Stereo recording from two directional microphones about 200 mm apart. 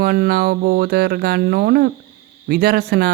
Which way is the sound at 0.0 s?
50° right (ahead or behind).